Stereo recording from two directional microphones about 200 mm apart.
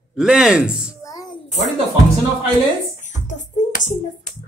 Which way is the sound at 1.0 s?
15° left (ahead or behind).